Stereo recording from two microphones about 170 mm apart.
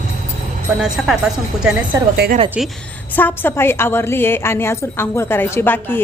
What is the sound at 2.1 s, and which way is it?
Speech, 70° right (ahead or behind).